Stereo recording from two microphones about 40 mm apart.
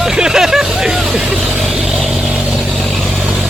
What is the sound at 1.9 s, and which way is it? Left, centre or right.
Vehicle, centre.